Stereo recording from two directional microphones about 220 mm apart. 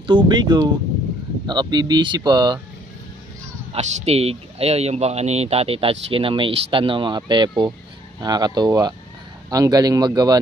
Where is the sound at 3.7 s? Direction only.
30° right (ahead or behind).